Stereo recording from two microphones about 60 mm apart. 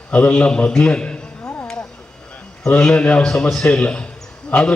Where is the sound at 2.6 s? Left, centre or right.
Centre.